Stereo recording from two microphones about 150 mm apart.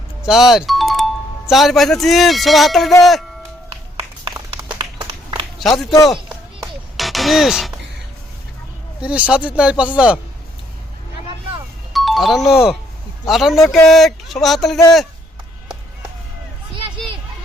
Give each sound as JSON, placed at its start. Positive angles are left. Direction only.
{"t": 0.3, "sound": "speech", "side_deg": 0}
{"t": 4.5, "sound": "a sound", "side_deg": -35}
{"t": 5.5, "sound": "speech", "side_deg": 0}
{"t": 6.1, "sound": "a sound", "side_deg": 0}
{"t": 9.0, "sound": "speech", "side_deg": -10}
{"t": 11.9, "sound": "speech", "side_deg": 0}